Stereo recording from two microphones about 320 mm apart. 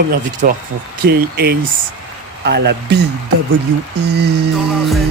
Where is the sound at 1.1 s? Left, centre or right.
Right.